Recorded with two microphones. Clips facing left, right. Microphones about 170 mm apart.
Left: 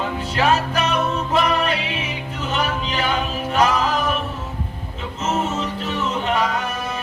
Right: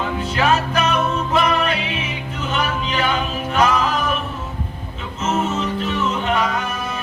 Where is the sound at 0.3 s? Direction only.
35° left (ahead or behind).